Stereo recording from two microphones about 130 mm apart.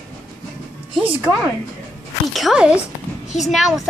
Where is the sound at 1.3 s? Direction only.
10° right (ahead or behind).